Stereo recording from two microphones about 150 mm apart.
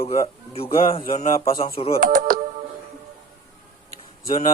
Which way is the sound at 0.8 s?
40° left (ahead or behind).